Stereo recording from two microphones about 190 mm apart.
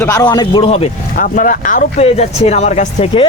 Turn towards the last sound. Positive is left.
turn(degrees=30)  # may be behind; listen again after turning